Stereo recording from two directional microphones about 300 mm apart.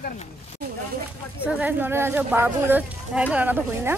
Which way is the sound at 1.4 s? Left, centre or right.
Centre.